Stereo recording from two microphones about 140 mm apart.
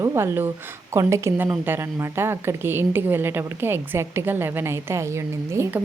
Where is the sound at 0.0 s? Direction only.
20° right (ahead or behind).